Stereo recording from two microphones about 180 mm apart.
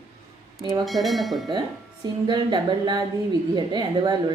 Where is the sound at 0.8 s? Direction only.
Centre (ahead or behind).